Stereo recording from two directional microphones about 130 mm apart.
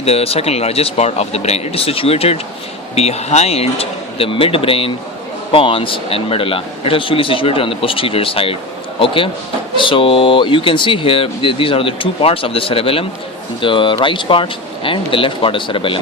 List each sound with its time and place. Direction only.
0.0 s speech: 50° left (ahead or behind)